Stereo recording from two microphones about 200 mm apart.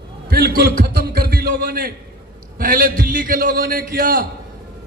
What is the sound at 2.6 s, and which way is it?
A man's voice, 45° right (ahead or behind).